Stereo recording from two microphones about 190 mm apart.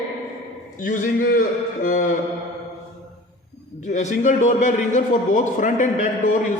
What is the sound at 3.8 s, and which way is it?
A man's voice, 40° left (ahead or behind).